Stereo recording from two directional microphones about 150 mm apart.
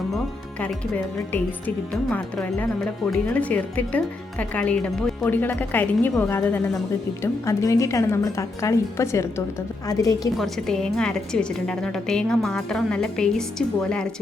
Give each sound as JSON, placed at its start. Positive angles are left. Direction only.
{"t": 0.6, "sound": "a woman's voice", "side_deg": 10}
{"t": 10.3, "sound": "a woman's voice", "side_deg": 0}